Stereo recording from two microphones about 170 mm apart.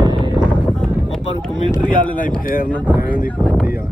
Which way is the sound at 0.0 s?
30° right (ahead or behind).